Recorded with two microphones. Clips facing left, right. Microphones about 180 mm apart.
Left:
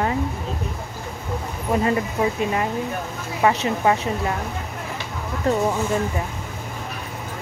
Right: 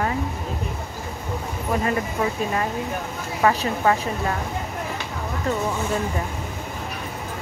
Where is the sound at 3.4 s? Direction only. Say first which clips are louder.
Left 1 dB; 20° left (ahead or behind).